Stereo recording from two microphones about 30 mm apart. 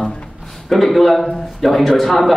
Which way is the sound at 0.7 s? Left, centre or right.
Centre.